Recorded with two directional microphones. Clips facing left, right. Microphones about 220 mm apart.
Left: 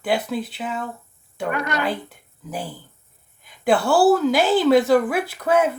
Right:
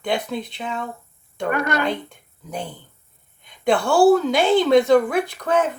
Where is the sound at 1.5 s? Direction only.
50° right (ahead or behind).